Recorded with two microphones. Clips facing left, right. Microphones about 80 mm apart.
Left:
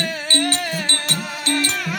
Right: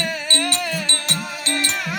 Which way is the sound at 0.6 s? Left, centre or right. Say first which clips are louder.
Left 1 dB; left.